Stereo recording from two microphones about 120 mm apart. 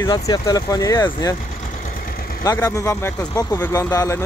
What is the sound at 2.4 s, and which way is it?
Speech, 30° left (ahead or behind).